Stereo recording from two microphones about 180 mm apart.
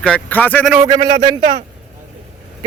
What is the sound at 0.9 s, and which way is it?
Speech, 20° right (ahead or behind).